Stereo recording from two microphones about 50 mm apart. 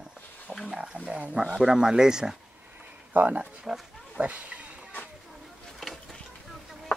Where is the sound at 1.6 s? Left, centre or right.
Centre.